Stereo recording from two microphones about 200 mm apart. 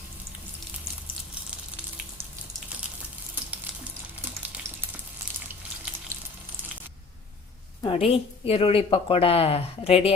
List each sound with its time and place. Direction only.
7.8 s a woman's voice: 25° left (ahead or behind)